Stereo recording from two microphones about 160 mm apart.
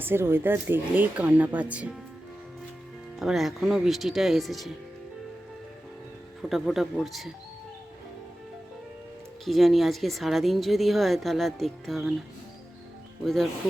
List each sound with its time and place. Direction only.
0.0 s speech: 15° right (ahead or behind)
3.2 s a woman's voice: centre (ahead or behind)
6.5 s a woman's voice: centre (ahead or behind)
9.4 s a woman's voice: centre (ahead or behind)
13.2 s a woman's voice: centre (ahead or behind)